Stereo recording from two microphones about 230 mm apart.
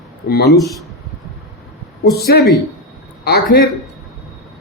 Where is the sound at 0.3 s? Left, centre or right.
Left.